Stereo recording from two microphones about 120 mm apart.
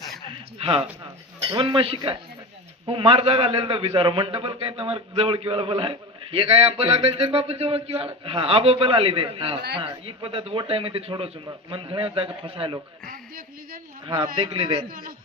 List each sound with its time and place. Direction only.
0.3 s a sound: 50° right (ahead or behind)
1.5 s a man's voice: 45° right (ahead or behind)
14.1 s a man's voice: 40° right (ahead or behind)